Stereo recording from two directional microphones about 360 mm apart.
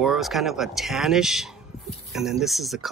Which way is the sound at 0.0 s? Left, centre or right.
Centre.